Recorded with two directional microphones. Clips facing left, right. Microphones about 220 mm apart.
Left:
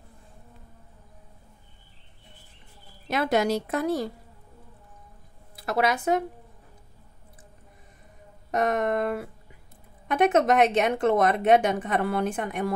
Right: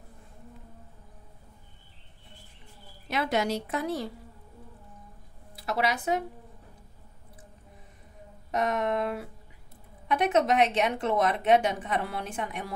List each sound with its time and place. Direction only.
3.1 s speech: 45° left (ahead or behind)
5.7 s speech: 50° left (ahead or behind)
8.5 s speech: 50° left (ahead or behind)